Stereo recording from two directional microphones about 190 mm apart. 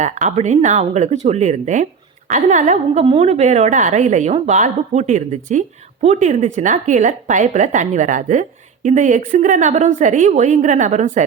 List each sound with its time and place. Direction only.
0.0 s speech: 40° right (ahead or behind)